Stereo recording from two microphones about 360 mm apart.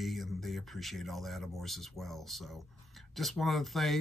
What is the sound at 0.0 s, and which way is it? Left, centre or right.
Speech, centre.